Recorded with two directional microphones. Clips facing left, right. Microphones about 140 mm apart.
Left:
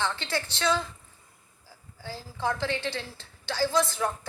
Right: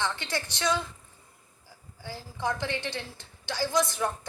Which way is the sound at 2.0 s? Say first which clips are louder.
Left 1 dB; 15° right (ahead or behind).